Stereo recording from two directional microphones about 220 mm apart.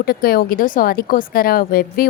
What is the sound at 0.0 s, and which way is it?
Speech, 40° left (ahead or behind).